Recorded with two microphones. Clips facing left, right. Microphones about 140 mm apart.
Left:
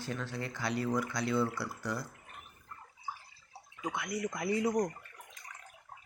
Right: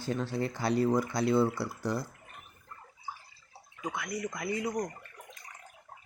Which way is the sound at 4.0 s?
20° left (ahead or behind).